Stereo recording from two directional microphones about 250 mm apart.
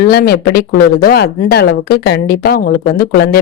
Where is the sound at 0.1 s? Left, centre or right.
Left.